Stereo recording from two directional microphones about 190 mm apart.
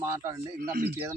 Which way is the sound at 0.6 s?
50° right (ahead or behind).